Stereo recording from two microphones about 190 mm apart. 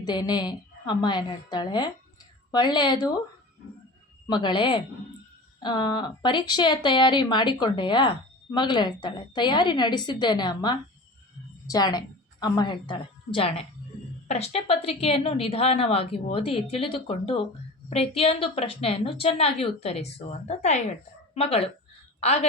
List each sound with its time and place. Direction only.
0.0 s a woman's voice: 20° left (ahead or behind)
4.3 s a woman's voice: 25° left (ahead or behind)